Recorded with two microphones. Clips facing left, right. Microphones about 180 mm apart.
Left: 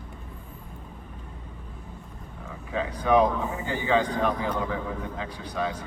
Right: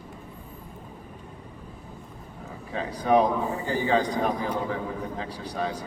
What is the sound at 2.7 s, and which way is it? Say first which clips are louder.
A man's voice: even; 35° right (ahead or behind).